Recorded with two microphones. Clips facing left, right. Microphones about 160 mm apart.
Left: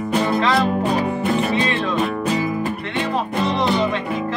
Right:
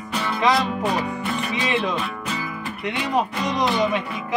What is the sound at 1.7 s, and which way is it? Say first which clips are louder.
Speech: left 1 dB; 15° right (ahead or behind).